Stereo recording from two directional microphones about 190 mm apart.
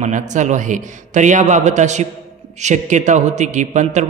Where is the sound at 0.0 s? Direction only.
40° right (ahead or behind).